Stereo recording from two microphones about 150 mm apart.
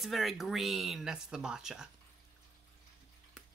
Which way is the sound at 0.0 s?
Centre (ahead or behind).